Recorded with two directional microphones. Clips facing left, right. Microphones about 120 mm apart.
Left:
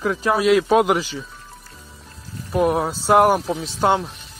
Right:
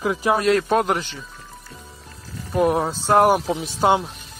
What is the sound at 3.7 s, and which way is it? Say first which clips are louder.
Speech: right 1 dB; 10° right (ahead or behind).